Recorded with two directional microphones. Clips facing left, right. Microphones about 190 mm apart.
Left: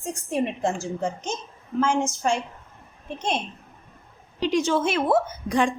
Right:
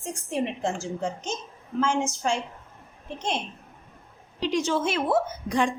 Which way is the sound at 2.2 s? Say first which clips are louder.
Left 3 dB; 45° left (ahead or behind).